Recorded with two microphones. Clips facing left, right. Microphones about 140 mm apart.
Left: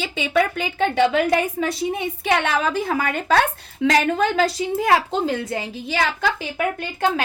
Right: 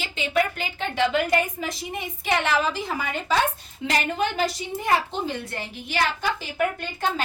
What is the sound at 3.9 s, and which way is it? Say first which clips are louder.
A woman's voice: left 6 dB; 90° left.